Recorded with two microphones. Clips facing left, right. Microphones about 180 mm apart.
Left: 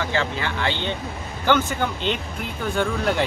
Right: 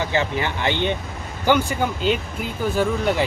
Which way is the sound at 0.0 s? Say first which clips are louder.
Right 2 dB; 20° right (ahead or behind).